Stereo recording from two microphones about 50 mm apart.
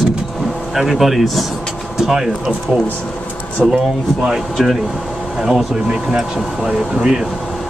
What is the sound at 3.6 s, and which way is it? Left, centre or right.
Speech, centre.